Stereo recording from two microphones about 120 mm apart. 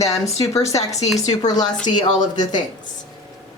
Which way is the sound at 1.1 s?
70° left (ahead or behind).